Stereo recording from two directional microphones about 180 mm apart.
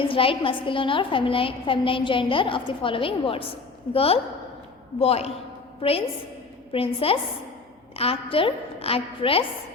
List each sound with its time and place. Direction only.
0.0 s a woman's voice: 30° left (ahead or behind)
6.7 s a woman's voice: 30° left (ahead or behind)